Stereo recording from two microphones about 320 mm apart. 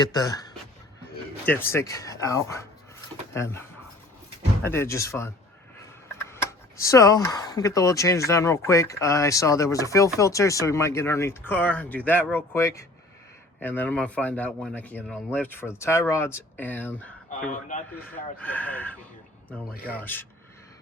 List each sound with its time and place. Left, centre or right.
0.0 s speech: centre
4.7 s speech: centre
17.2 s a man's voice: left
18.3 s speech: centre
19.7 s a man's voice: left
20.0 s speech: centre